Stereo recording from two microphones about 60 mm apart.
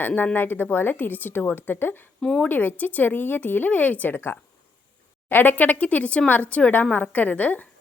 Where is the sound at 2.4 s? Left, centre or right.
Left.